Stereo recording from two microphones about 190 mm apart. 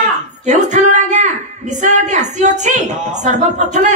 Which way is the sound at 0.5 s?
40° right (ahead or behind).